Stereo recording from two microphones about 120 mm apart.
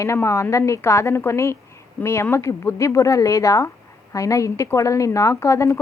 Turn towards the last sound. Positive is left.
turn(degrees=25)  # may be behind; listen again after turning